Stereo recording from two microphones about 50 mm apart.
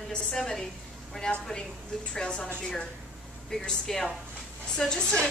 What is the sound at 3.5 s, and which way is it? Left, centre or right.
Speech, centre.